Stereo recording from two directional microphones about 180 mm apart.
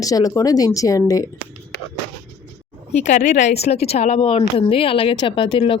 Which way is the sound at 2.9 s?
40° left (ahead or behind).